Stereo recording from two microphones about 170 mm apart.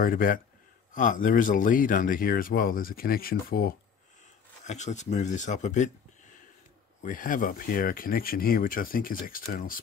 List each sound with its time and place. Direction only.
0.0 s speech: 55° left (ahead or behind)
4.6 s speech: 45° left (ahead or behind)